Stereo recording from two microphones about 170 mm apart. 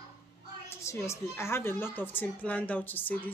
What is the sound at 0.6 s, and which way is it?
A woman's voice, 15° left (ahead or behind).